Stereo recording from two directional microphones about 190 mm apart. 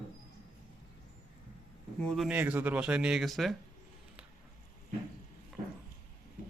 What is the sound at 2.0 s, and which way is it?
Speech, centre (ahead or behind).